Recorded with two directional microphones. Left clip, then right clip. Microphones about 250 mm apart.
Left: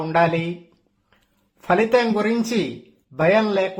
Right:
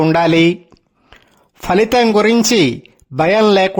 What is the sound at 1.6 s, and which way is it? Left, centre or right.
A man's voice, right.